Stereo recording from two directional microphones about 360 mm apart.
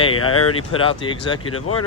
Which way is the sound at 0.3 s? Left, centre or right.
Left.